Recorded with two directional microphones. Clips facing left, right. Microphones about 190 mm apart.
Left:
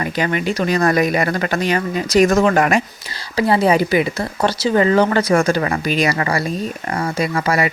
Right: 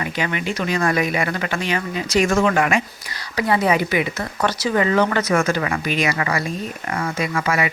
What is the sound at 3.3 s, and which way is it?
Speech, 30° left (ahead or behind).